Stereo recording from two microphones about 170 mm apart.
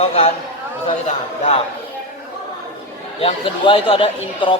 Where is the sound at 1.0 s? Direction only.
40° left (ahead or behind).